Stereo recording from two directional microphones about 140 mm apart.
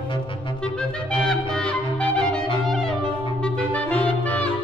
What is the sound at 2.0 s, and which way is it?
Music, 5° left (ahead or behind).